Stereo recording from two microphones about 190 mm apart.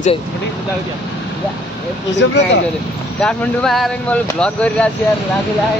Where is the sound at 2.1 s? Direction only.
70° left (ahead or behind).